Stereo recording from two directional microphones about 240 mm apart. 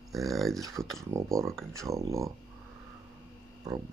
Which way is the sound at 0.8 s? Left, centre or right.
Centre.